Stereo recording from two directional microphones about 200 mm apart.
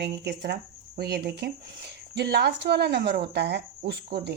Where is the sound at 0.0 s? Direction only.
60° right (ahead or behind).